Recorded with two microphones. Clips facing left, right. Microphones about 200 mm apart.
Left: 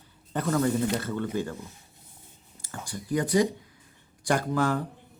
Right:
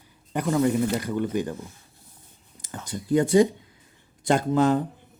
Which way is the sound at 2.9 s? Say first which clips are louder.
Right 6 dB; 25° right (ahead or behind).